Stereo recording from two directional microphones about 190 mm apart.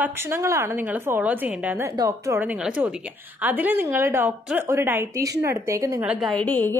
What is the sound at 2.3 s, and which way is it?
A woman's voice, 5° right (ahead or behind).